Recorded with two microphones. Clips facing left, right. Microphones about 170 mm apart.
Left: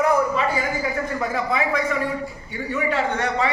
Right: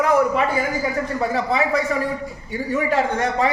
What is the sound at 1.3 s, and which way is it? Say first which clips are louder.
Speech: right 3 dB; 35° right (ahead or behind).